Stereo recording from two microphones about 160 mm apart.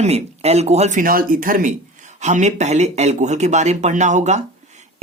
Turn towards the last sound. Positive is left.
turn(degrees=-45)  # may be behind; listen again after turning